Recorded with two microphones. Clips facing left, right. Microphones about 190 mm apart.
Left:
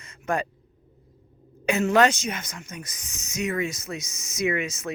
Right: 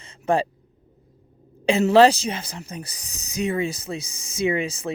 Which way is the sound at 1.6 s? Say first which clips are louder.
Right 5 dB; 30° right (ahead or behind).